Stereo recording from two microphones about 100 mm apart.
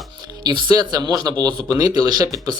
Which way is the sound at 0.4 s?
40° right (ahead or behind).